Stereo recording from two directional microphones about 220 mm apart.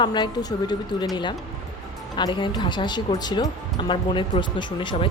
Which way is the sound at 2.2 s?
20° left (ahead or behind).